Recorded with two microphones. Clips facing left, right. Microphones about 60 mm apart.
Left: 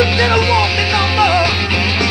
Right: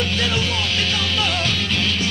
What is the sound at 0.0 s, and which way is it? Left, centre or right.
Music, left.